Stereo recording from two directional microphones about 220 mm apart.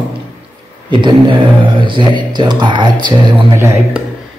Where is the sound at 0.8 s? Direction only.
20° right (ahead or behind).